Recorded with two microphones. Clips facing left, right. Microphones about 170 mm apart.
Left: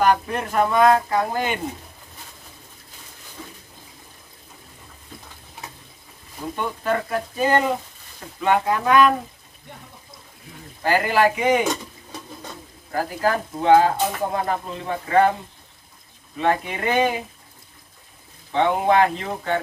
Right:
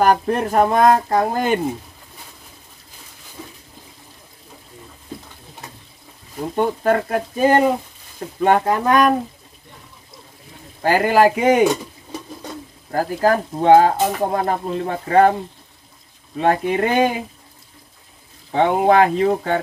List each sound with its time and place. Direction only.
0.0 s speech: 40° right (ahead or behind)
6.5 s speech: 45° right (ahead or behind)
8.4 s speech: 45° right (ahead or behind)
10.8 s speech: 45° right (ahead or behind)
12.9 s speech: 45° right (ahead or behind)
16.3 s speech: 45° right (ahead or behind)
18.5 s speech: 40° right (ahead or behind)